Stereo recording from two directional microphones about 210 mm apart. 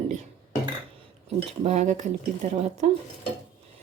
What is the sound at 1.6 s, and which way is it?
A woman's voice, 35° right (ahead or behind).